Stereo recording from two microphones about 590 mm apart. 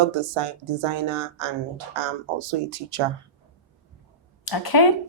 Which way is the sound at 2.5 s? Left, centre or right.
Right.